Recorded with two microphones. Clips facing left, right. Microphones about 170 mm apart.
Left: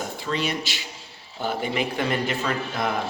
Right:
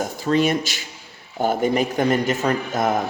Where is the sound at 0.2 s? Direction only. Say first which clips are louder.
Right 9 dB; 45° right (ahead or behind).